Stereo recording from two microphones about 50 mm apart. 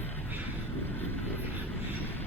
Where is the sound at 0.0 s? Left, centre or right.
Left.